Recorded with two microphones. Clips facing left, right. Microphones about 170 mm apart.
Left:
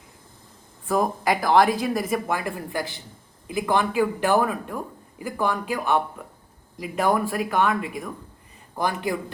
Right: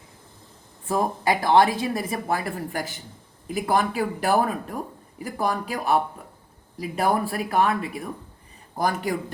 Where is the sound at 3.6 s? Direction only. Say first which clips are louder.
Left 1 dB; 35° right (ahead or behind).